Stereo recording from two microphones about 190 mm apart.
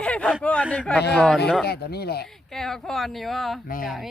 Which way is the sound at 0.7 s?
5° left (ahead or behind).